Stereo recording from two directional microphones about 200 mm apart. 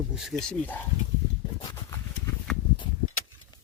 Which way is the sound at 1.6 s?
20° left (ahead or behind).